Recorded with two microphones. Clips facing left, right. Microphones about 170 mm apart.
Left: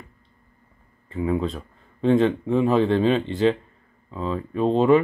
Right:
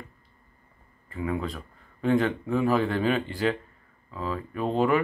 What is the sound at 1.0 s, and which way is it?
Speech, 25° left (ahead or behind).